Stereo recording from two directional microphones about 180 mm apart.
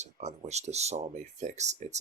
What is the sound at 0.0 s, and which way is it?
Speech, 40° right (ahead or behind).